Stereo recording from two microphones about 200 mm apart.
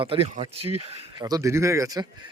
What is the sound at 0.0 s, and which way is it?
Speech, 30° right (ahead or behind).